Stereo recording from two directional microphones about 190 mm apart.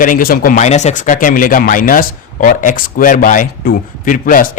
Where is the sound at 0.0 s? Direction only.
50° left (ahead or behind).